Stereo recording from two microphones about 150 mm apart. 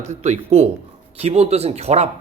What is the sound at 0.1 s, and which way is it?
A man's voice, 50° right (ahead or behind).